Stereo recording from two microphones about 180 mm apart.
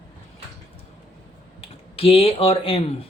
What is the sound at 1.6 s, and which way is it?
Speech, 30° left (ahead or behind).